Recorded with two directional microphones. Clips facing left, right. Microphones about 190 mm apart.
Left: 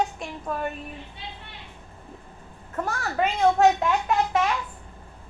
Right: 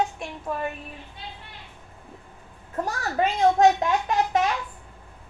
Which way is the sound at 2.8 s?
40° right (ahead or behind).